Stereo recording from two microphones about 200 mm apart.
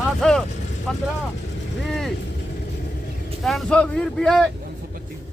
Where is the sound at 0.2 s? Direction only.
5° left (ahead or behind).